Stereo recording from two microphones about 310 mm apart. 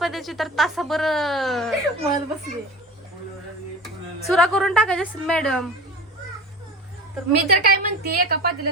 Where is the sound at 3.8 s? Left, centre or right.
Centre.